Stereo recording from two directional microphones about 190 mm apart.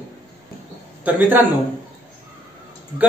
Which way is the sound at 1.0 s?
10° right (ahead or behind).